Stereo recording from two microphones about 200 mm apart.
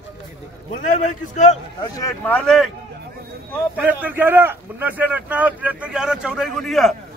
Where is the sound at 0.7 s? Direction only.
35° left (ahead or behind).